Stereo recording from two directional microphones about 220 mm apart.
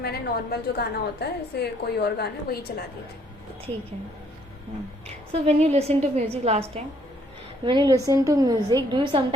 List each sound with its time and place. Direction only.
0.0 s a woman's voice: 45° left (ahead or behind)
5.0 s a woman's voice: 30° right (ahead or behind)